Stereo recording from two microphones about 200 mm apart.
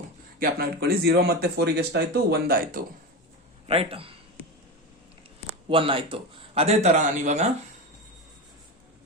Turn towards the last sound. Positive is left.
turn(degrees=-35)  # may be behind; listen again after turning